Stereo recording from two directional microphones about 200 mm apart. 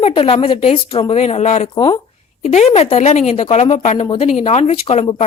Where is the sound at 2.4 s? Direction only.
35° left (ahead or behind).